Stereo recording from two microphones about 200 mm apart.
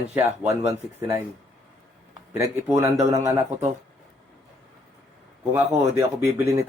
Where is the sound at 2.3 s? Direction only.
15° right (ahead or behind).